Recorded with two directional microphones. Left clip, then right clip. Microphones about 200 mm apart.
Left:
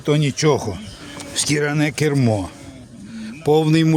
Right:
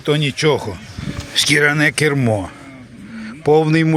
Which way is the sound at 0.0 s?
10° left (ahead or behind).